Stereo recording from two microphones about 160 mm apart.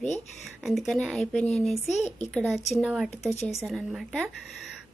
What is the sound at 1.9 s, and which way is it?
Speech, 45° left (ahead or behind).